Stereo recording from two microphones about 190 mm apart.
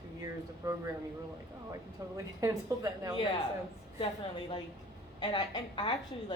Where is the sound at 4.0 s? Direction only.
25° left (ahead or behind).